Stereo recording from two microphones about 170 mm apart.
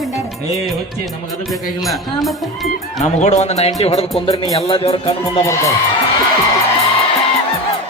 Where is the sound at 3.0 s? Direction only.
40° left (ahead or behind).